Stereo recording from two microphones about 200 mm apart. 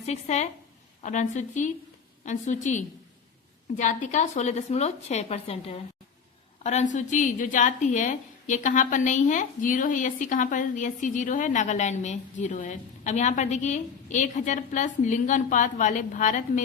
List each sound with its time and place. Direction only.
0.0 s a woman's voice: 35° left (ahead or behind)